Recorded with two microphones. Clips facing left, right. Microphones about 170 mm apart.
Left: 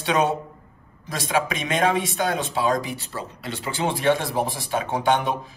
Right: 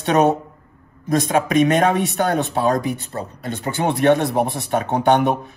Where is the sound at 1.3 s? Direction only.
55° right (ahead or behind).